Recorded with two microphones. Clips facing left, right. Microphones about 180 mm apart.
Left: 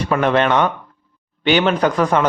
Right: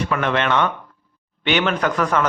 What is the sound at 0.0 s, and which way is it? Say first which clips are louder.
A man's voice: left 5 dB; 35° left (ahead or behind).